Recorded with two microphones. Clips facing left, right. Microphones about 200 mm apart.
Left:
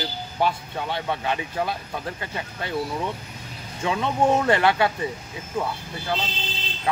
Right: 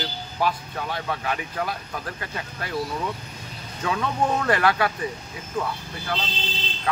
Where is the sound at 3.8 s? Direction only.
25° left (ahead or behind).